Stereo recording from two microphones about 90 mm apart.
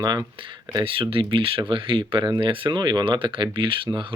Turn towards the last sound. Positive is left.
turn(degrees=-70)  # may be behind; listen again after turning